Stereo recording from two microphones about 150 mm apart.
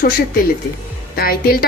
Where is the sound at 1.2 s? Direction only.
85° left.